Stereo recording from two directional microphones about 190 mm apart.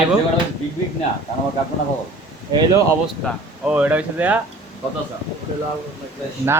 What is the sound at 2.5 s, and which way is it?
Speech, 20° right (ahead or behind).